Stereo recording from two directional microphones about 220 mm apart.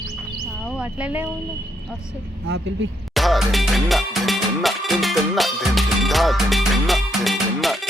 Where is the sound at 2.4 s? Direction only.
50° right (ahead or behind).